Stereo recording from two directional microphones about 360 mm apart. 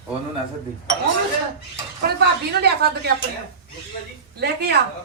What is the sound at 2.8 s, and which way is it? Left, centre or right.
Speech, right.